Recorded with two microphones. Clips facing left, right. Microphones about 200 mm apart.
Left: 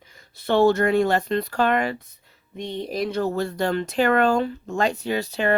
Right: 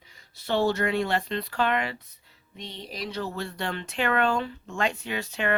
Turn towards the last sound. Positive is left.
turn(degrees=35)  # may be behind; listen again after turning